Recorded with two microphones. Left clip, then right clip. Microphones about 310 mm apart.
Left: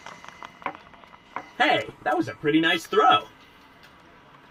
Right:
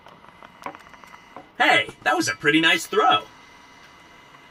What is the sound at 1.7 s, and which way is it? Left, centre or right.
Music, right.